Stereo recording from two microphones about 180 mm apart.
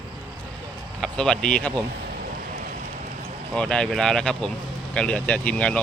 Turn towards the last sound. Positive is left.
turn(degrees=5)  # may be behind; listen again after turning